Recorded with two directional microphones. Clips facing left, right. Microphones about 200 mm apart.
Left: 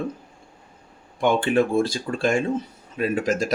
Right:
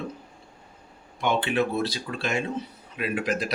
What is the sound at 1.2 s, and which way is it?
Speech, 50° left (ahead or behind).